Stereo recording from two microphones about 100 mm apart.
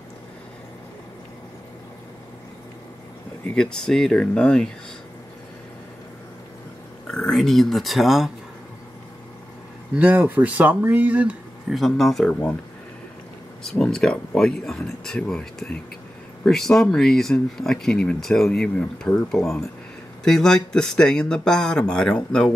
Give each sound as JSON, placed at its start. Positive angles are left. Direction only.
{"t": 3.5, "sound": "speech", "side_deg": 5}
{"t": 7.1, "sound": "speech", "side_deg": 5}
{"t": 9.9, "sound": "speech", "side_deg": -15}
{"t": 11.7, "sound": "speech", "side_deg": 0}
{"t": 13.7, "sound": "speech", "side_deg": 5}